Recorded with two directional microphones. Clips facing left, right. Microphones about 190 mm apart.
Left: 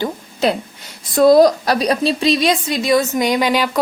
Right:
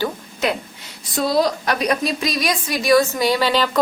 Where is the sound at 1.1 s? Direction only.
50° left (ahead or behind).